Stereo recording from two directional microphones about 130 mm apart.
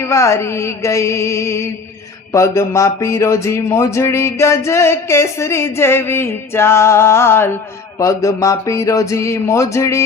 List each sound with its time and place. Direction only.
0.0 s music: 25° left (ahead or behind)